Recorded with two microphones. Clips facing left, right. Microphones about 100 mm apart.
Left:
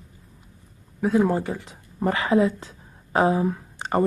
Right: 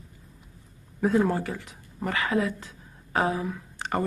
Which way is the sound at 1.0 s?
Centre (ahead or behind).